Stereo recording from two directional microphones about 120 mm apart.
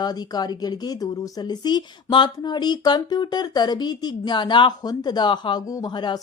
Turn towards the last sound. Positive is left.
turn(degrees=40)  # may be behind; listen again after turning